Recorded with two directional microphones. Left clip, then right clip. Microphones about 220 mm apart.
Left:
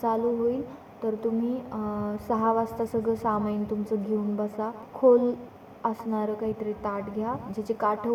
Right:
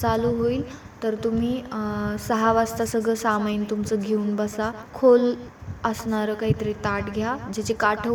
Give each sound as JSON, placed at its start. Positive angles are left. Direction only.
{"t": 0.0, "sound": "a woman's voice", "side_deg": -20}
{"t": 1.7, "sound": "a sound", "side_deg": -45}
{"t": 2.1, "sound": "a woman's voice", "side_deg": -20}
{"t": 4.6, "sound": "a woman's voice", "side_deg": -40}
{"t": 5.1, "sound": "a woman's voice", "side_deg": -20}